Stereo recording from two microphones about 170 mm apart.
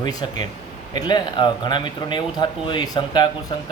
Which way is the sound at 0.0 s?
25° left (ahead or behind).